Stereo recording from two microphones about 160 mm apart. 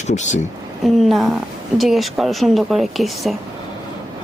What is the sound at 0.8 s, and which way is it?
Speech, centre (ahead or behind).